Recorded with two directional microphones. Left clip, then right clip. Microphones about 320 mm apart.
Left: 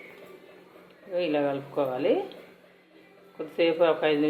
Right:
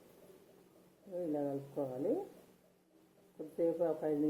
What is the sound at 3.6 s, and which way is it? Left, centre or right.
Speech, centre.